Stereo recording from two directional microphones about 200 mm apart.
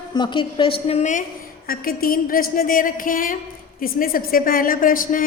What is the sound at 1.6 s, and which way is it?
A woman's voice, 50° left (ahead or behind).